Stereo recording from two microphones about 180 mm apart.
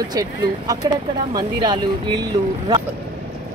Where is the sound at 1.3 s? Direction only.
25° right (ahead or behind).